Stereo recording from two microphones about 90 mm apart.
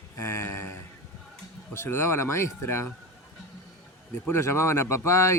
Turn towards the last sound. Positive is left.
turn(degrees=30)  # may be behind; listen again after turning